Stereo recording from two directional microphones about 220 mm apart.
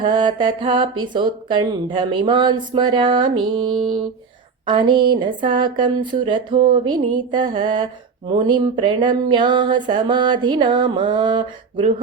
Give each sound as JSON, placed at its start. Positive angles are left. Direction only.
{"t": 0.0, "sound": "speech", "side_deg": -20}